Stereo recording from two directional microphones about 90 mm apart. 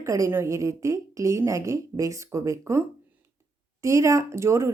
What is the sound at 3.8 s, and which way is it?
Speech, 35° right (ahead or behind).